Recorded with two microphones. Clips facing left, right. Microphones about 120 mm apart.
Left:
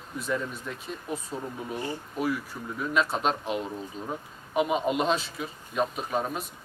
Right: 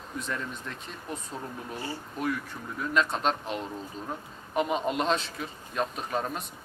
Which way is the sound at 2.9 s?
5° left (ahead or behind).